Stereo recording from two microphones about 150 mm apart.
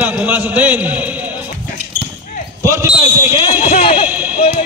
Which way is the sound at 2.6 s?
20° right (ahead or behind).